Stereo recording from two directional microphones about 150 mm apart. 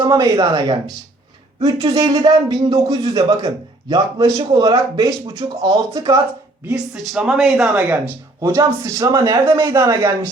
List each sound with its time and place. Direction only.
0.0 s speech: 25° right (ahead or behind)
6.7 s speech: 5° right (ahead or behind); by 10.2 s 20° right (ahead or behind)